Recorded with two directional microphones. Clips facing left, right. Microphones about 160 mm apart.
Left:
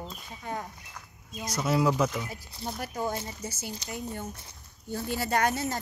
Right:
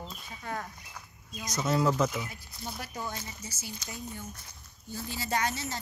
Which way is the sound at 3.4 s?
55° left (ahead or behind).